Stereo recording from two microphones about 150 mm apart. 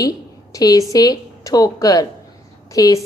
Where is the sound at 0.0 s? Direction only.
25° left (ahead or behind).